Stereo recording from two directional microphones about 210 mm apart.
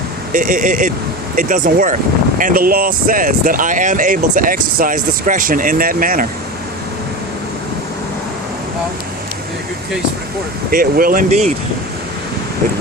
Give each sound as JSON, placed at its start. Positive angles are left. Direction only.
{"t": 0.3, "sound": "speech", "side_deg": -40}
{"t": 10.7, "sound": "speech", "side_deg": -45}